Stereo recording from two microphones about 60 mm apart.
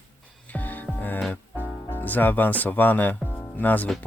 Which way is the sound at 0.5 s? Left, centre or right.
Left.